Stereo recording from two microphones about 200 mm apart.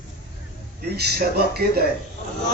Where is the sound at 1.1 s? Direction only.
50° right (ahead or behind).